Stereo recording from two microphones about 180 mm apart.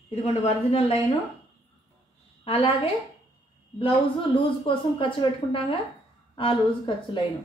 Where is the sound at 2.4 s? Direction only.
30° left (ahead or behind).